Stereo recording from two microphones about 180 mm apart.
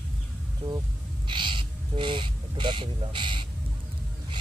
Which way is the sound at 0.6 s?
25° right (ahead or behind).